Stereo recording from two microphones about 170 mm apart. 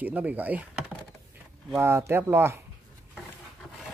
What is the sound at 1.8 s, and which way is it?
Speech, 15° right (ahead or behind).